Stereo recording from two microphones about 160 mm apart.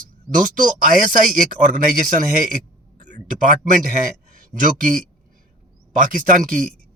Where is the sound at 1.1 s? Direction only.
55° right (ahead or behind).